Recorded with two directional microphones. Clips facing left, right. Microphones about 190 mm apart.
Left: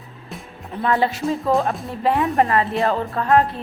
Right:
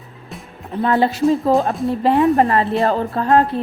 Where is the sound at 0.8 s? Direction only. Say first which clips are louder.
Right 4 dB; 35° right (ahead or behind).